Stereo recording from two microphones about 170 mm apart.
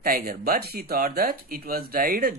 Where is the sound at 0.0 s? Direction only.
60° right (ahead or behind).